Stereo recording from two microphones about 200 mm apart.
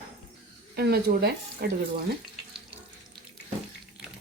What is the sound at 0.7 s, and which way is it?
Speech, 50° right (ahead or behind).